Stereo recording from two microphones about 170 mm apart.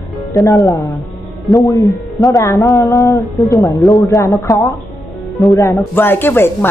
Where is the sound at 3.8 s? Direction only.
Centre (ahead or behind).